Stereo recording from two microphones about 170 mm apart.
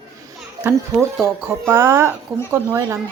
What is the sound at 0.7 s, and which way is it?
A woman's voice, 10° right (ahead or behind).